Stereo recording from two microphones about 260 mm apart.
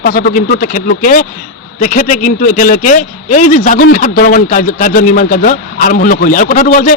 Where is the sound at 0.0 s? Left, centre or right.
Left.